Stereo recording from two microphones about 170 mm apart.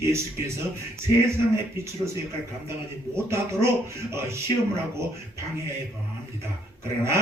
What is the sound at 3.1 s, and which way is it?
Speech, 15° right (ahead or behind).